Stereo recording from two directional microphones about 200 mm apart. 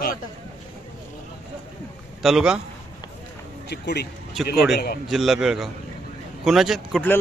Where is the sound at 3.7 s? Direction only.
55° left (ahead or behind).